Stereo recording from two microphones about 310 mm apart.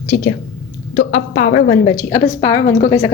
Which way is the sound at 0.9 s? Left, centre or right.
Left.